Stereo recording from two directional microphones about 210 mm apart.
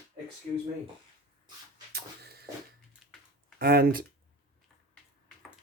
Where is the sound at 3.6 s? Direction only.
45° right (ahead or behind).